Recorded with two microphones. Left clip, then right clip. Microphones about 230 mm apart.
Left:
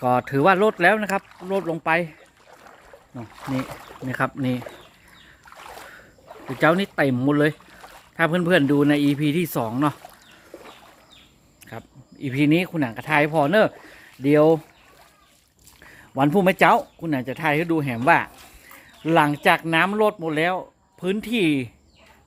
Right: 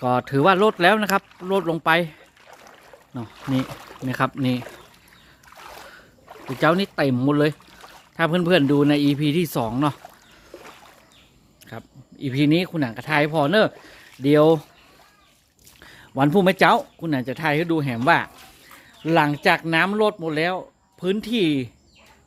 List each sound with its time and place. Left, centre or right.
0.0 s speech: centre
2.5 s boat: centre
3.4 s speech: centre
4.0 s speech: centre
6.4 s speech: centre
11.6 s speech: centre
15.8 s speech: centre